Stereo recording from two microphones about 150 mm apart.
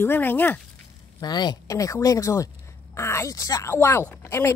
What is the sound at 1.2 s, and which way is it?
Speech, 30° left (ahead or behind).